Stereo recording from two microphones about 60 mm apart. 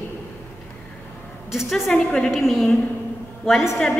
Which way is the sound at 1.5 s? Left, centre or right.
Centre.